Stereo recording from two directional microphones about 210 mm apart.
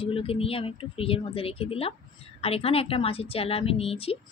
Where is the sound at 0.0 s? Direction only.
25° left (ahead or behind).